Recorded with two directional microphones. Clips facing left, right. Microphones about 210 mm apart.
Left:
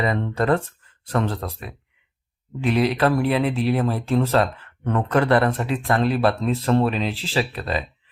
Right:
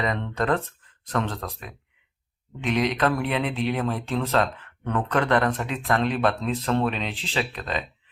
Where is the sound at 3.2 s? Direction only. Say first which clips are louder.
Left 5 dB; 5° left (ahead or behind).